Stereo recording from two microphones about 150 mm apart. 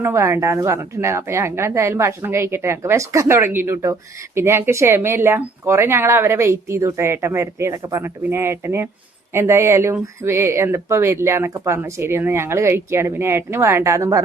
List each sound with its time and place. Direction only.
0.0 s speech: 20° right (ahead or behind)